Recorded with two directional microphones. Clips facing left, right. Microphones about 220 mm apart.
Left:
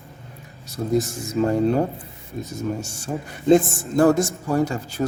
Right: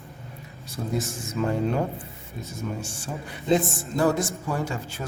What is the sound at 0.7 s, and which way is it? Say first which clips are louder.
Speech: left 7 dB; 40° left (ahead or behind).